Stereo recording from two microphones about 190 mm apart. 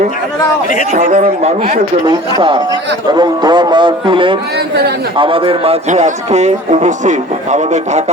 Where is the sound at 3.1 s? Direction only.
20° right (ahead or behind).